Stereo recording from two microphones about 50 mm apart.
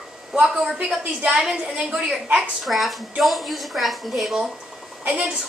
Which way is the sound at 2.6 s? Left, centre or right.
Centre.